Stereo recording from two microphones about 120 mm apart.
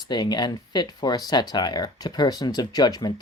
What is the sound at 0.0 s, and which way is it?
Speech, 35° left (ahead or behind).